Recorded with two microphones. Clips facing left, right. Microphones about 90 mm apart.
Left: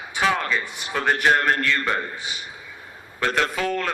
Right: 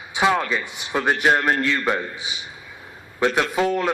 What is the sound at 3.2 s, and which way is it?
Speech, 20° right (ahead or behind).